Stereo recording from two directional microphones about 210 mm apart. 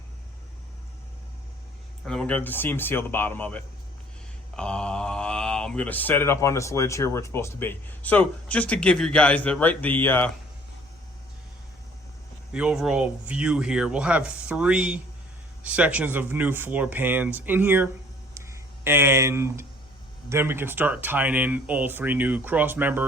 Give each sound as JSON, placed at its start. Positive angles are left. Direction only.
{"t": 2.0, "sound": "speech", "side_deg": 5}
{"t": 12.5, "sound": "speech", "side_deg": -5}
{"t": 18.3, "sound": "a sound", "side_deg": -15}
{"t": 20.3, "sound": "speech", "side_deg": -10}